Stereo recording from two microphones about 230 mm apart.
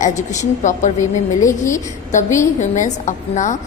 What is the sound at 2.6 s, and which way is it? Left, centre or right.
Speech, left.